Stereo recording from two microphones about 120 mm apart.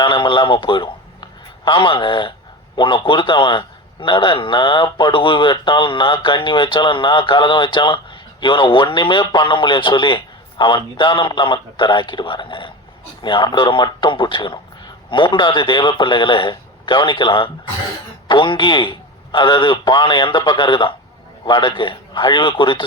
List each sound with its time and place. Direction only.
0.0 s a man's voice: 40° left (ahead or behind)